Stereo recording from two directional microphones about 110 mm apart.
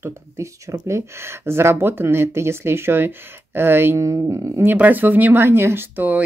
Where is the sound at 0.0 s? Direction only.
25° right (ahead or behind).